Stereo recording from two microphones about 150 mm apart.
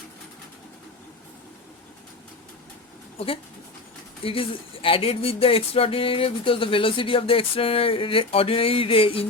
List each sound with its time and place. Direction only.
4.2 s speech: 40° left (ahead or behind)